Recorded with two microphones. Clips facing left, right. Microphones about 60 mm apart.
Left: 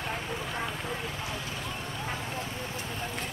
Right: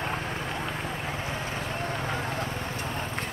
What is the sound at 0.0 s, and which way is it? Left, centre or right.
Run, right.